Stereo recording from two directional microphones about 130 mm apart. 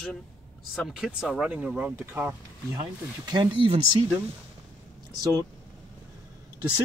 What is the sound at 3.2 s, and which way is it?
Speech, 35° right (ahead or behind).